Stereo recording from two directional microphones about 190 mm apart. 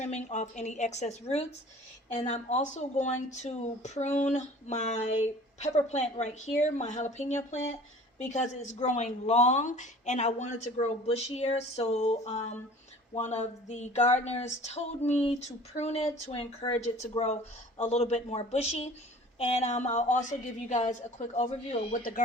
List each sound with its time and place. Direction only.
0.0 s speech: 35° left (ahead or behind)